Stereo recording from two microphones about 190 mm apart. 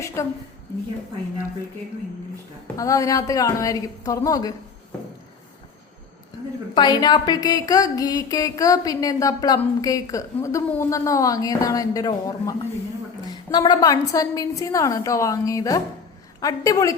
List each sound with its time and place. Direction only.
0.2 s a woman's voice: 15° left (ahead or behind)
2.7 s a woman's voice: 15° left (ahead or behind)
6.7 s a sound: 20° left (ahead or behind)
9.6 s a woman's voice: 15° left (ahead or behind)